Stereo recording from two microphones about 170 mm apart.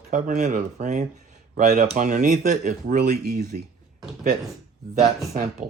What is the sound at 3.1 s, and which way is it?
Speech, 65° right (ahead or behind).